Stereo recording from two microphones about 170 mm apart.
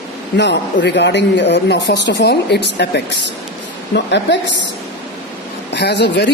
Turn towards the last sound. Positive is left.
turn(degrees=80)